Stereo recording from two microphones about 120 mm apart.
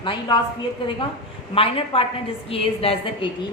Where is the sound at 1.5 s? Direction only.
50° left (ahead or behind).